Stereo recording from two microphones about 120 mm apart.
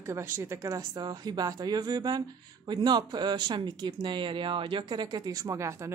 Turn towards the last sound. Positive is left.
turn(degrees=-25)  # may be behind; listen again after turning